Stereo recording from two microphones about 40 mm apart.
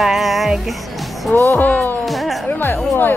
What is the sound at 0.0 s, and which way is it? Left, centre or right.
Music, centre.